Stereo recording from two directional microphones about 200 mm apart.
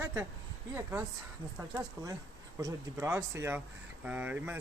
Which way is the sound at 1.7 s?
15° right (ahead or behind).